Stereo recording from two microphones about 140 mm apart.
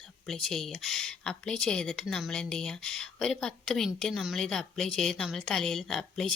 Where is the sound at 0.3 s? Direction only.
5° left (ahead or behind).